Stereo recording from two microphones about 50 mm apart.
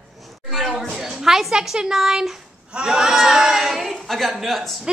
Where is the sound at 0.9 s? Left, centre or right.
Centre.